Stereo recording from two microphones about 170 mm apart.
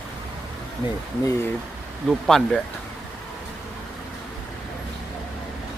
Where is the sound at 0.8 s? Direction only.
30° left (ahead or behind).